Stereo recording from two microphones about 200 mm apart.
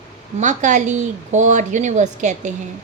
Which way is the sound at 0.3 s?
35° right (ahead or behind).